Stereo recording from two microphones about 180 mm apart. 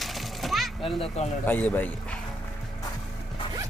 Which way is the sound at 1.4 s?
10° left (ahead or behind).